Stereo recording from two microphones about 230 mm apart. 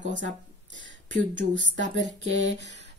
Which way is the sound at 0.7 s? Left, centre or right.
Right.